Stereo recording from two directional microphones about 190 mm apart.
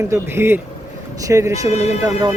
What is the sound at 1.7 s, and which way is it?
Speech, 35° left (ahead or behind).